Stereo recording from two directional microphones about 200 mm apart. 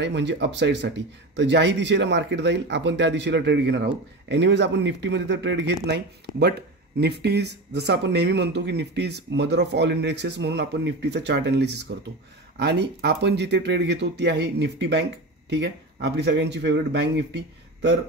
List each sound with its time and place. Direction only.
0.0 s speech: 60° right (ahead or behind)